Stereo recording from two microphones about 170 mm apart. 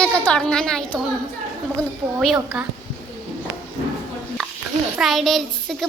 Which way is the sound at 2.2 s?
5° right (ahead or behind).